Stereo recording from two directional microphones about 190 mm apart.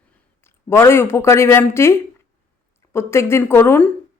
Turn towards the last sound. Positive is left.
turn(degrees=10)  # may be behind; listen again after turning